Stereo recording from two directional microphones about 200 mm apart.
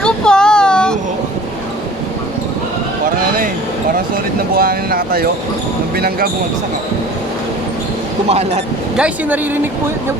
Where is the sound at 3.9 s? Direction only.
50° right (ahead or behind).